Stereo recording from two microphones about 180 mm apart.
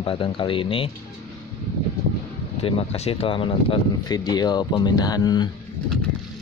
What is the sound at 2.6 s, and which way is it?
Speech, 35° left (ahead or behind).